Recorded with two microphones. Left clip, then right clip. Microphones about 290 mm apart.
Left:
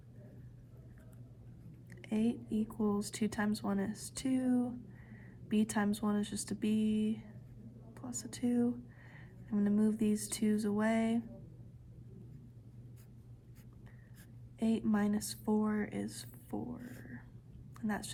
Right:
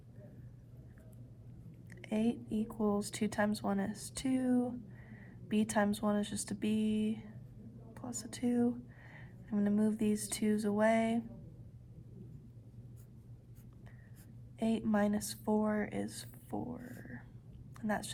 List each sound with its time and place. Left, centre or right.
1.9 s speech: centre
14.6 s a woman's voice: centre